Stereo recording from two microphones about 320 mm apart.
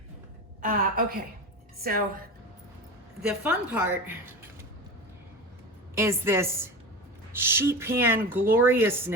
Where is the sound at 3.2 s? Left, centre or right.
Centre.